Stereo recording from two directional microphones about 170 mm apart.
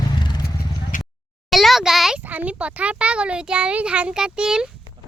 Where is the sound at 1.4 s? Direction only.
Centre (ahead or behind).